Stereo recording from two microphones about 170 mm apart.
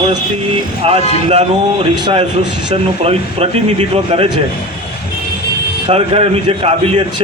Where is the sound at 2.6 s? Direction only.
35° right (ahead or behind).